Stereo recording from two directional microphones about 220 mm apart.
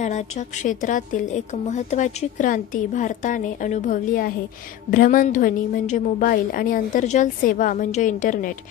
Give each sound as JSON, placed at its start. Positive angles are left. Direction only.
{"t": 0.7, "sound": "speech", "side_deg": 35}